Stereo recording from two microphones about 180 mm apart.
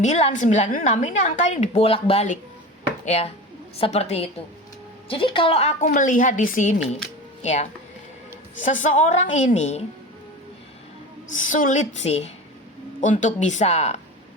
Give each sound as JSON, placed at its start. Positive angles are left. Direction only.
{"t": 0.0, "sound": "a woman's voice", "side_deg": 40}
{"t": 11.3, "sound": "a woman's voice", "side_deg": 45}